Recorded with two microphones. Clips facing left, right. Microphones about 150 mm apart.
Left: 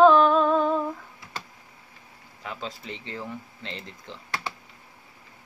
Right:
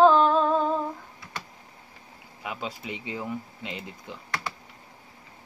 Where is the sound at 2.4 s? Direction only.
10° right (ahead or behind).